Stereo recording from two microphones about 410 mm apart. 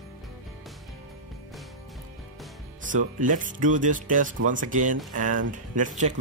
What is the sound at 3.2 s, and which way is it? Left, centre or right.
A man's voice, centre.